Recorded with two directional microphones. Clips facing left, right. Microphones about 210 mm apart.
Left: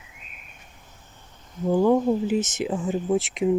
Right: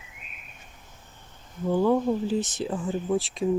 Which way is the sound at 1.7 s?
20° left (ahead or behind).